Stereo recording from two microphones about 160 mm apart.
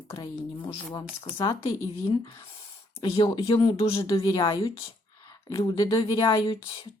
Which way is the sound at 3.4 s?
35° left (ahead or behind).